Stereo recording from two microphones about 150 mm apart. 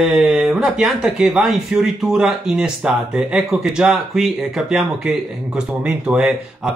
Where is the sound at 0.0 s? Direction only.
5° right (ahead or behind).